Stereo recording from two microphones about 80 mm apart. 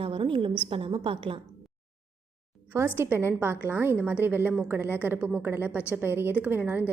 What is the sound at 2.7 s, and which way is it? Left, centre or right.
A woman's voice, right.